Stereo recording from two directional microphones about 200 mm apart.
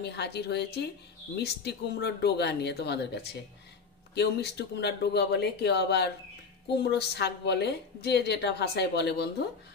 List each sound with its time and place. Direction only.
0.0 s a woman's voice: 55° left (ahead or behind)